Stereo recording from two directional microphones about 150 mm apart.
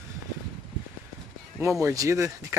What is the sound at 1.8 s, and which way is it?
Speech, 20° right (ahead or behind).